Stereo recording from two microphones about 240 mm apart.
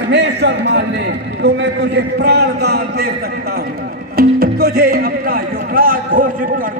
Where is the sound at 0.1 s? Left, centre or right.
Right.